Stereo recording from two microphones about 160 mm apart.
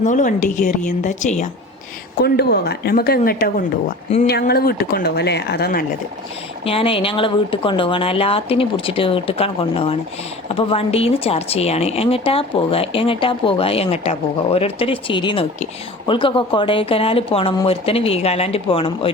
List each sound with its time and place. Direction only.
0.0 s a woman's voice: 50° left (ahead or behind)
2.2 s speech: 90° left; by 3.9 s 65° left (ahead or behind)
4.3 s speech: 80° left
6.7 s speech: 35° left (ahead or behind)